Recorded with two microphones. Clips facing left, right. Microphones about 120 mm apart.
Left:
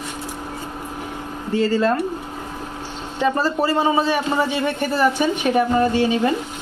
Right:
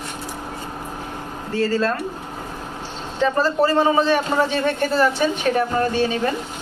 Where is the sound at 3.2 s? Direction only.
10° left (ahead or behind).